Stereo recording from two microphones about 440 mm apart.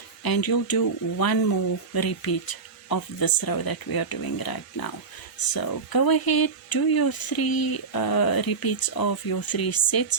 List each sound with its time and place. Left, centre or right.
0.2 s speech: left